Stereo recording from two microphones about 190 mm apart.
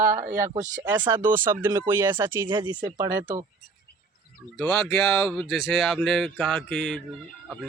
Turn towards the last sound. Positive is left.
turn(degrees=5)  # may be behind; listen again after turning